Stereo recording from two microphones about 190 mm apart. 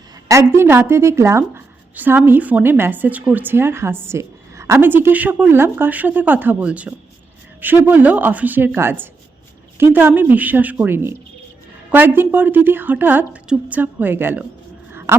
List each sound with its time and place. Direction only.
0.3 s a woman's voice: 15° right (ahead or behind)